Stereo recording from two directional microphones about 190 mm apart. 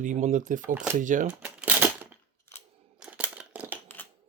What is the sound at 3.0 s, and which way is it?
Scissors, 5° right (ahead or behind).